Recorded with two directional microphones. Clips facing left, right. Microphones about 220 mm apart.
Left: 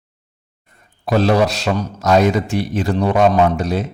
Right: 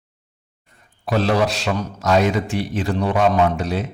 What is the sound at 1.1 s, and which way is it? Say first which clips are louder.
A man's voice: left 4 dB; 40° left (ahead or behind).